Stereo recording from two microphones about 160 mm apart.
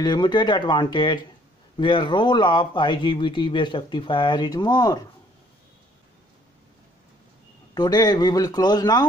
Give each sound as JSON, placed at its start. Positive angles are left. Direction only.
{"t": 0.0, "sound": "speech", "side_deg": 25}
{"t": 7.7, "sound": "speech", "side_deg": 25}